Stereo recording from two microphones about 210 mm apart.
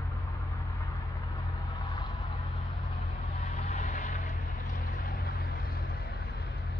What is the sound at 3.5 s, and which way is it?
Vehicle, 35° left (ahead or behind).